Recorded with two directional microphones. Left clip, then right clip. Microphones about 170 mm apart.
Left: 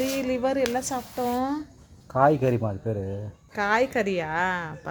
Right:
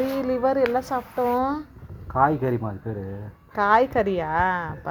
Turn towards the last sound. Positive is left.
turn(degrees=5)  # may be behind; listen again after turning